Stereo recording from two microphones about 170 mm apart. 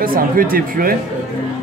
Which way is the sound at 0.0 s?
55° right (ahead or behind).